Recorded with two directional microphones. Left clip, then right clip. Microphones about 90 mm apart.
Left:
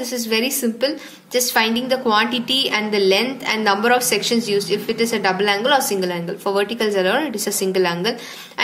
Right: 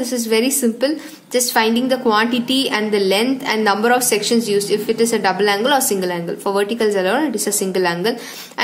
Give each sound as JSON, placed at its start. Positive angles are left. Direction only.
{"t": 0.0, "sound": "a woman's voice", "side_deg": -45}
{"t": 6.0, "sound": "a woman's voice", "side_deg": -40}